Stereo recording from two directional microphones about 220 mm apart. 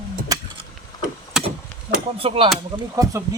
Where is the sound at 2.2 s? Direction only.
25° right (ahead or behind).